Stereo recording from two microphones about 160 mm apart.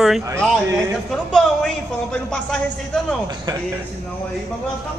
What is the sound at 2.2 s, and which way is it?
Speech, 5° left (ahead or behind).